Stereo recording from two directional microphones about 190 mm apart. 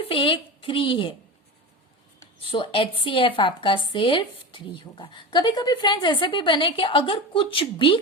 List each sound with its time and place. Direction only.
0.0 s speech: 30° left (ahead or behind)
2.4 s a woman's voice: 30° left (ahead or behind)